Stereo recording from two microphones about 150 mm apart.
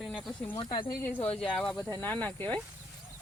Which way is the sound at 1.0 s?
10° left (ahead or behind).